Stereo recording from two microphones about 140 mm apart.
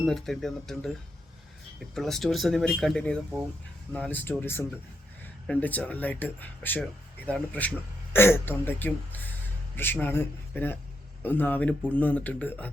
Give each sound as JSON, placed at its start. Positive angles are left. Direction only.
{"t": 0.0, "sound": "speech", "side_deg": 0}
{"t": 2.0, "sound": "speech", "side_deg": 0}